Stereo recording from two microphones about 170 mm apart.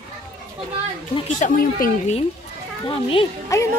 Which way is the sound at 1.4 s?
50° left (ahead or behind).